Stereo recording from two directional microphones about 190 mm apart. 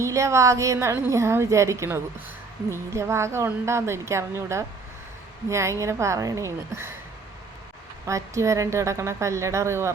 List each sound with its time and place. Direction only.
0.0 s a woman's voice: 15° right (ahead or behind)
8.0 s a woman's voice: 15° right (ahead or behind)